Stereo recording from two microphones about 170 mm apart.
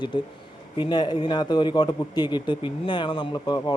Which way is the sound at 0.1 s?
30° left (ahead or behind).